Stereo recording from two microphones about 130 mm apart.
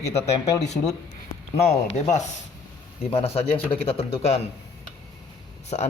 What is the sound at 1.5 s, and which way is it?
Speech, 60° left (ahead or behind).